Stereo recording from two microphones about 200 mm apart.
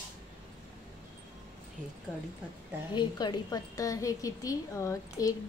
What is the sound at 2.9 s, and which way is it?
A woman's voice, 20° left (ahead or behind).